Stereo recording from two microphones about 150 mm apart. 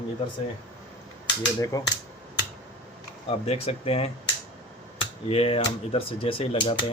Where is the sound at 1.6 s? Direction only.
25° left (ahead or behind).